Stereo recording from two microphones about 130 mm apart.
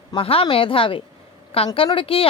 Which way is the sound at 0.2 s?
45° left (ahead or behind).